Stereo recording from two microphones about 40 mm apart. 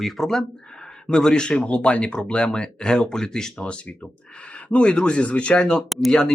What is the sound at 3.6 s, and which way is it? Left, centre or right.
Speech, left.